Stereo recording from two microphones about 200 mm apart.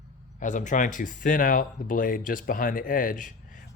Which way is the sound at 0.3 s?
40° left (ahead or behind).